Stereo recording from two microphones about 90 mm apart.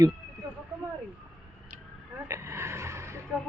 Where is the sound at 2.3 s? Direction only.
30° right (ahead or behind).